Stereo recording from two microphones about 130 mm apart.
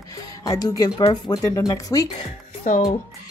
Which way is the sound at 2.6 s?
75° left (ahead or behind).